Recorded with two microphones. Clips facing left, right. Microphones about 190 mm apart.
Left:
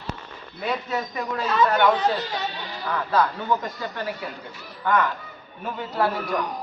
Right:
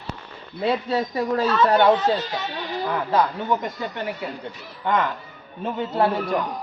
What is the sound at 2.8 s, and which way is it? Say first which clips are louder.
Speech: right 1 dB; 20° right (ahead or behind).